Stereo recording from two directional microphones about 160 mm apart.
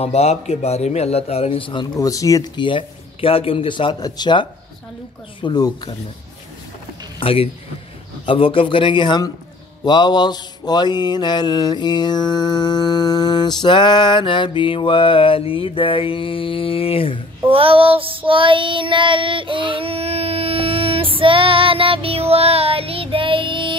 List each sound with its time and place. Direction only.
0.0 s a man's voice: 40° left (ahead or behind)
5.4 s mantra: 25° left (ahead or behind)
7.2 s a man's voice: 35° left (ahead or behind)
9.8 s mantra: 30° left (ahead or behind)
17.5 s child singing: 35° right (ahead or behind)